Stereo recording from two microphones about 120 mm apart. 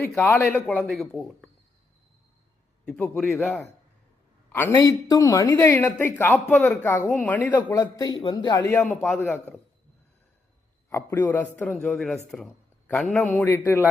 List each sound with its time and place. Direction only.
0.2 s a woman's voice: 15° left (ahead or behind)
0.8 s a man's voice: 5° left (ahead or behind)
2.8 s a man's voice: 10° left (ahead or behind)
4.5 s a woman's voice: 15° left (ahead or behind)
4.8 s a woman's voice: 30° left (ahead or behind); by 7.6 s 15° left (ahead or behind)
7.7 s a man's voice: 30° left (ahead or behind)
8.7 s a woman's voice: 15° left (ahead or behind)
10.8 s a man's voice: 20° left (ahead or behind)
11.7 s a man's voice: 5° left (ahead or behind)